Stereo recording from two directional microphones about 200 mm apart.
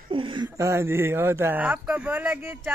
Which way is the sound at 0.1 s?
25° right (ahead or behind).